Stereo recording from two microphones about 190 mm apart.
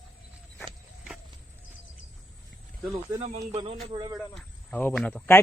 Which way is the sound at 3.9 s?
25° right (ahead or behind).